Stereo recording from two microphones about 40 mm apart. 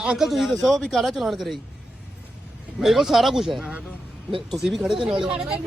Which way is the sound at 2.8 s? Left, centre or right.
Centre.